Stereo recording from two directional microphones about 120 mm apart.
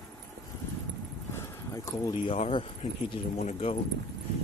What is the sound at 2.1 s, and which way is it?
Speech, 45° left (ahead or behind).